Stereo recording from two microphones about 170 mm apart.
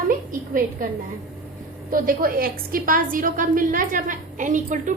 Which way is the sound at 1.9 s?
55° right (ahead or behind).